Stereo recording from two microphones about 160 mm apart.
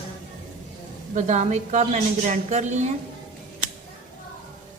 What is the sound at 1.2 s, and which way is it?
A man's voice, 45° right (ahead or behind).